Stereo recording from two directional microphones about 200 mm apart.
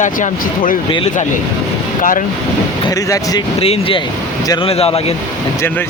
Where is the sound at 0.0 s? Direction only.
40° left (ahead or behind).